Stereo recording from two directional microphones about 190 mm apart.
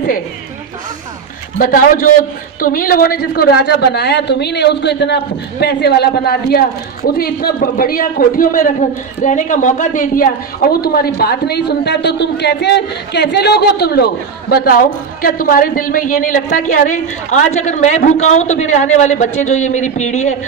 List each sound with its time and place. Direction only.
1.6 s a woman's voice: 50° left (ahead or behind)